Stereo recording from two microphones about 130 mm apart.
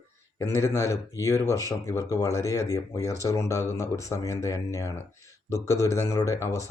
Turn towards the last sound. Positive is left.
turn(degrees=25)  # may be behind; listen again after turning